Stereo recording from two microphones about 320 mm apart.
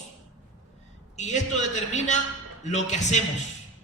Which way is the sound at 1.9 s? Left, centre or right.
Left.